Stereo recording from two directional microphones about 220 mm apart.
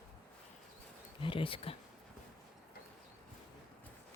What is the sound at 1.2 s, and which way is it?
Speech, 25° left (ahead or behind).